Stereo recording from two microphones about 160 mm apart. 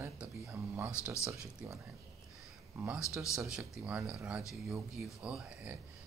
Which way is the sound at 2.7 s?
15° right (ahead or behind).